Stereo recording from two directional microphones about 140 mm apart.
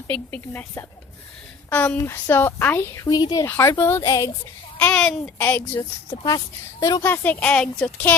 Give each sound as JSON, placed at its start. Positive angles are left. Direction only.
{"t": 0.1, "sound": "a woman's voice", "side_deg": 10}
{"t": 4.8, "sound": "a woman's voice", "side_deg": 10}
{"t": 6.2, "sound": "speech", "side_deg": 25}
{"t": 7.0, "sound": "a woman's voice", "side_deg": 15}